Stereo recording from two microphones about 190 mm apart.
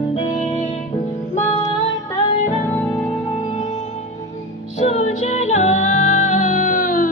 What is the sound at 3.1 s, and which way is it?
Music, 30° left (ahead or behind).